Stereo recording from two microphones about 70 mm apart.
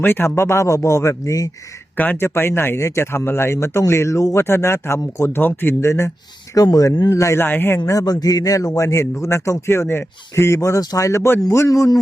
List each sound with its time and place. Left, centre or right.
0.0 s a man's voice: left
2.0 s speech: left
2.2 s speech: left
5.4 s speech: left
5.8 s a man's voice: left
6.5 s speech: left
7.1 s a man's voice: left
7.4 s speech: left
7.9 s a man's voice: left
10.8 s a man's voice: left